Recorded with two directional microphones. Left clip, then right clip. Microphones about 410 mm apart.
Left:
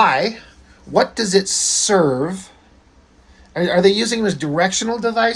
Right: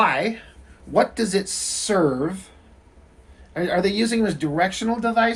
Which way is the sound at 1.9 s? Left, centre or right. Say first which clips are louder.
Left 3 dB; left.